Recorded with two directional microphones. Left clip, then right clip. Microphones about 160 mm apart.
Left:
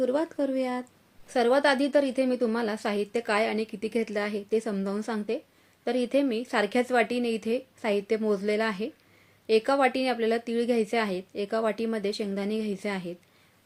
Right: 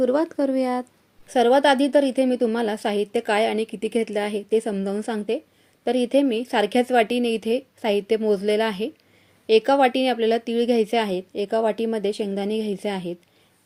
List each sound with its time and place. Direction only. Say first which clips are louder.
0.0 s a woman's voice: right 6 dB; 35° right (ahead or behind)